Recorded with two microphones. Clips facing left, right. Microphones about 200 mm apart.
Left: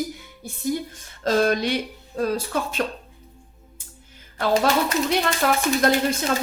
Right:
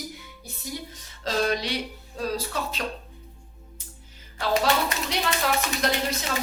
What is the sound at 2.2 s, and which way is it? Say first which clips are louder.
Speech: left 5 dB; 55° left (ahead or behind).